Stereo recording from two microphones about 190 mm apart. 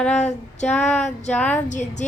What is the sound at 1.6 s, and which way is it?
Speech, 40° left (ahead or behind).